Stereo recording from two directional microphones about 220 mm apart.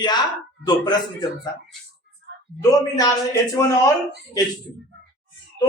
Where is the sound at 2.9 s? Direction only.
15° left (ahead or behind).